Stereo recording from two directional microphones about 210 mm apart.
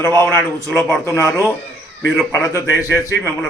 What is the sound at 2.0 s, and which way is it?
Speech, 5° left (ahead or behind).